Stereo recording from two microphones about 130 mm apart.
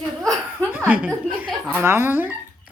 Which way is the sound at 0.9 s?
15° right (ahead or behind).